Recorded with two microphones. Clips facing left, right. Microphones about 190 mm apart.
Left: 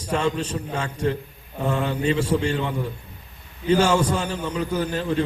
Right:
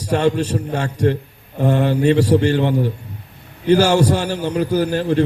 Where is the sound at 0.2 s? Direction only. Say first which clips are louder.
Right 7 dB; 70° right (ahead or behind).